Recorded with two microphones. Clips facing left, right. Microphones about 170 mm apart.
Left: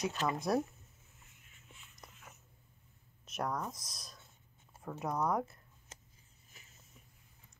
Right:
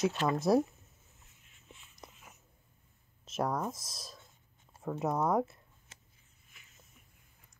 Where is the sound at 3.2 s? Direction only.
25° right (ahead or behind).